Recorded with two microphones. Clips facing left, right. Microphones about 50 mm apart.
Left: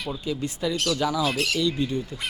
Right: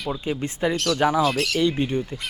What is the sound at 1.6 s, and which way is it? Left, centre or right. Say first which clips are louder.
Speech: right 3 dB; right.